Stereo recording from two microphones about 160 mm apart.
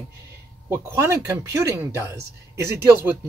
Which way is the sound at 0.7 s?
15° right (ahead or behind).